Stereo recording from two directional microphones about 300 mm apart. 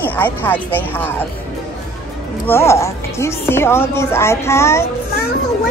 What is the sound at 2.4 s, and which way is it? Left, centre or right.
Speech, centre.